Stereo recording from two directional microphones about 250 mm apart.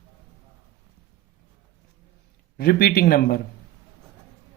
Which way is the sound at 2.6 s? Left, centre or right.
Left.